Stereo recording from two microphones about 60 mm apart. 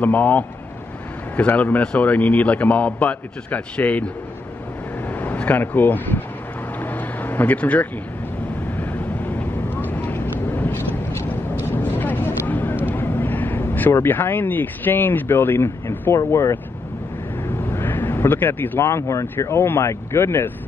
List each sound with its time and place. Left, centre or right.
0.0 s a man's voice: left
5.2 s speech: left
6.8 s vehicle: left
9.4 s vehicle: left
12.0 s a sound: left
16.3 s speech: left
17.6 s vehicle: left
18.8 s speech: left
19.5 s speech: left